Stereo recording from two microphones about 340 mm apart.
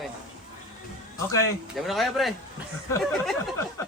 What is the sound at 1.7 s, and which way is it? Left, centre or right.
Speech, centre.